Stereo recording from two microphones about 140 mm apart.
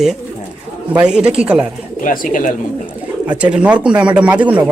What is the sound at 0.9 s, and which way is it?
Speech, 5° right (ahead or behind).